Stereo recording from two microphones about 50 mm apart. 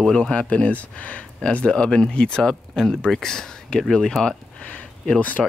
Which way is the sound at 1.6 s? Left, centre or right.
Centre.